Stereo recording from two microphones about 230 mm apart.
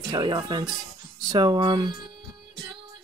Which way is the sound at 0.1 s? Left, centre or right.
Centre.